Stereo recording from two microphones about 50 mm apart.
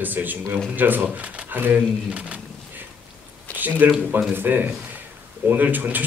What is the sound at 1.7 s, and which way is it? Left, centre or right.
Speech, right.